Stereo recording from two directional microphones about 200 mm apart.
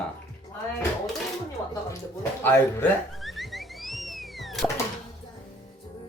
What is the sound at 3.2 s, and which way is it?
Music, centre (ahead or behind).